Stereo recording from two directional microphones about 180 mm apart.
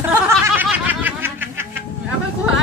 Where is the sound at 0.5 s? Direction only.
10° right (ahead or behind).